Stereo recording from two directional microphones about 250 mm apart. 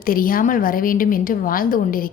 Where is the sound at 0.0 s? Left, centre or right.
Left.